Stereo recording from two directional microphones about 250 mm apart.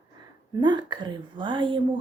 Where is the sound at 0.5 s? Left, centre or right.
Centre.